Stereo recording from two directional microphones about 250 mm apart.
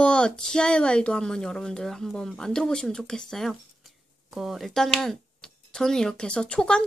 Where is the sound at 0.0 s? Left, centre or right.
Centre.